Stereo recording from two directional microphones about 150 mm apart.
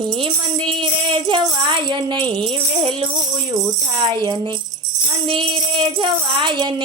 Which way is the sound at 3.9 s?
30° right (ahead or behind).